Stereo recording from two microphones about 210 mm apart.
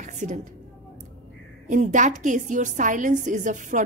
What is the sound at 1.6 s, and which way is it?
A woman's voice, 35° right (ahead or behind).